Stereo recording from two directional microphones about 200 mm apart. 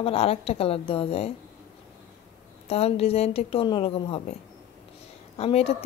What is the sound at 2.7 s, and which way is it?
A woman's voice, 30° left (ahead or behind).